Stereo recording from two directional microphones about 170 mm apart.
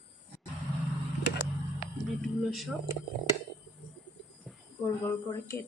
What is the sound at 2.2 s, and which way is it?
Speech, centre (ahead or behind).